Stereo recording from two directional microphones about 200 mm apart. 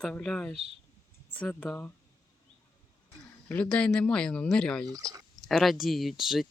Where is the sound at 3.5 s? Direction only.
5° left (ahead or behind).